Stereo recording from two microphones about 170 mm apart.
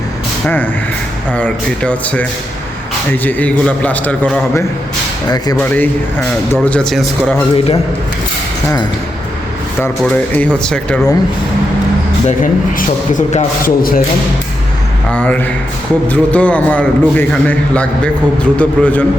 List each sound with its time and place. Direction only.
0.4 s a man's voice: 10° left (ahead or behind)
7.5 s a man's voice: 35° left (ahead or behind)
10.0 s speech: 5° left (ahead or behind)
12.4 s a man's voice: 50° left (ahead or behind)
15.1 s a man's voice: 10° left (ahead or behind)